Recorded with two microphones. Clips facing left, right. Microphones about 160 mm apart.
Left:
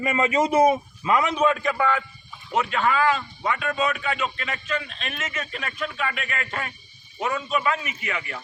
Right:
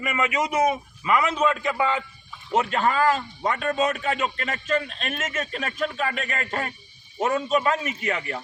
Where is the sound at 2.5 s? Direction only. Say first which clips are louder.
Right 1 dB; 40° right (ahead or behind).